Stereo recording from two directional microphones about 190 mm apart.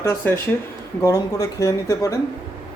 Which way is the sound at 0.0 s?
15° left (ahead or behind).